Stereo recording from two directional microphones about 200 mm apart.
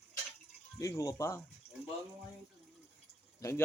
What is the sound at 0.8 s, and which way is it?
Speech, 15° left (ahead or behind).